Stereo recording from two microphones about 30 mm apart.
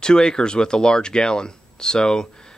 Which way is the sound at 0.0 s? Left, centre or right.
Left.